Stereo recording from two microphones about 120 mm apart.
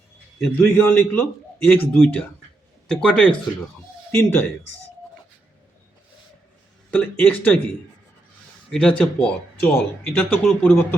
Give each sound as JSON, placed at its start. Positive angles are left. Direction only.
{"t": 0.8, "sound": "speech", "side_deg": 20}
{"t": 4.1, "sound": "speech", "side_deg": 20}
{"t": 6.9, "sound": "speech", "side_deg": 10}
{"t": 8.7, "sound": "speech", "side_deg": 5}